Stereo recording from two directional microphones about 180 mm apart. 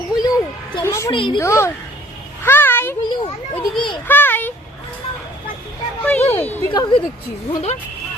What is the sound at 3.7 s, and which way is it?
Speech, 25° left (ahead or behind).